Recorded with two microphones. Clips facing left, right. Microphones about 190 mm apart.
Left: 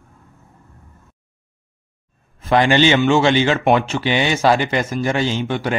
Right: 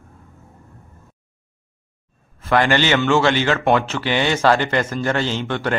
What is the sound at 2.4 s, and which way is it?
A man's voice, 15° left (ahead or behind).